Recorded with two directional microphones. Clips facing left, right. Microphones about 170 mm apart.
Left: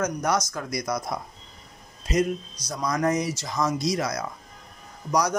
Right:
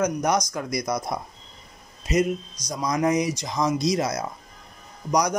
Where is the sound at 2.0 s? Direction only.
10° right (ahead or behind).